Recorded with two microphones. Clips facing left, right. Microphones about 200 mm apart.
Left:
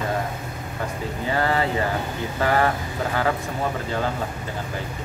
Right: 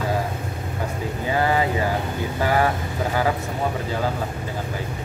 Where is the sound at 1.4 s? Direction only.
10° right (ahead or behind).